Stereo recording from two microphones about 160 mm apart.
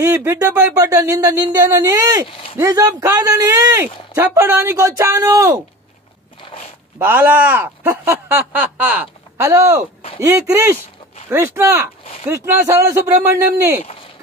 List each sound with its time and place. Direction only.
0.0 s speech: 15° right (ahead or behind)
7.0 s speech: 10° right (ahead or behind)